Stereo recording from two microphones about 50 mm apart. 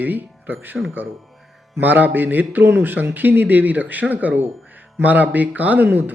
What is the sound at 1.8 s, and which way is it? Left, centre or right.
Speech, right.